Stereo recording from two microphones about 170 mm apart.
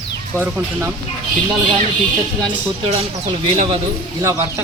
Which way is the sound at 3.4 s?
30° right (ahead or behind).